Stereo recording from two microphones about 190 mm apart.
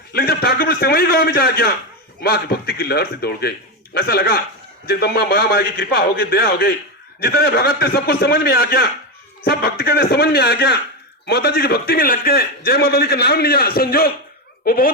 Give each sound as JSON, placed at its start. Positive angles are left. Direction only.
{"t": 0.1, "sound": "a man's voice", "side_deg": 55}